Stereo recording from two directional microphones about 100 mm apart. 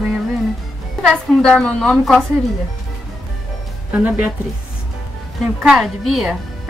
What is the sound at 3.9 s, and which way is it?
Speech, 15° right (ahead or behind).